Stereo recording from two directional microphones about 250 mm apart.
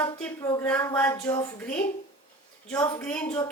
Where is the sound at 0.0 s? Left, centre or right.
Centre.